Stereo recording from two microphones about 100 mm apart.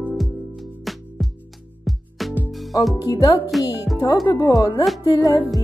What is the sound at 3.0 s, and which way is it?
Music, 40° left (ahead or behind).